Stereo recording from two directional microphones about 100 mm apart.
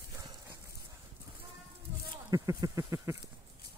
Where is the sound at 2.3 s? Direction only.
35° right (ahead or behind).